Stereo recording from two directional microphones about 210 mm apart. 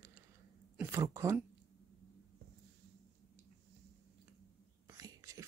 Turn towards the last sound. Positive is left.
turn(degrees=-15)  # may be behind; listen again after turning